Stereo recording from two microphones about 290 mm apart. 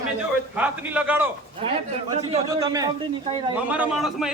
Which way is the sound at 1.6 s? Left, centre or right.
Centre.